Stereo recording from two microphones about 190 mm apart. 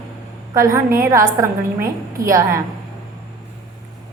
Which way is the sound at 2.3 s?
15° right (ahead or behind).